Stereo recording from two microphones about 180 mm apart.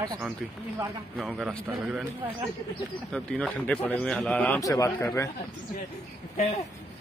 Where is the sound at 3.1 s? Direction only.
5° left (ahead or behind).